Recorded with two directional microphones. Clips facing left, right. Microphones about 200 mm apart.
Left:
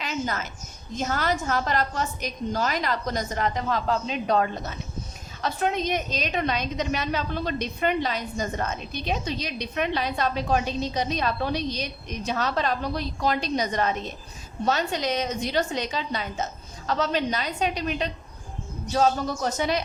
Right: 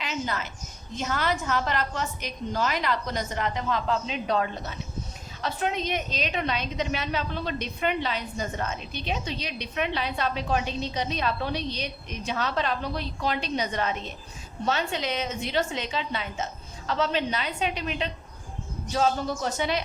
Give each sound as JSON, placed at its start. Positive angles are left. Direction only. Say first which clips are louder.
{"t": 0.0, "sound": "a woman's voice", "louder": "left 2 dB", "side_deg": 45}